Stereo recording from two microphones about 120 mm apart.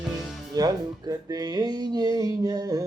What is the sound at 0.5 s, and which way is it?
Speech, 35° right (ahead or behind).